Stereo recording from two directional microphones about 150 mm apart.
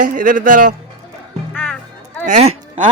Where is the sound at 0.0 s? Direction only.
65° right (ahead or behind).